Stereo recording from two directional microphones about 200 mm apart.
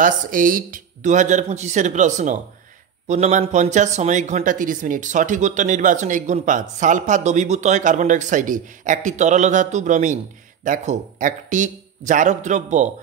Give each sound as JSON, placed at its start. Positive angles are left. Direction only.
{"t": 0.0, "sound": "speech", "side_deg": -45}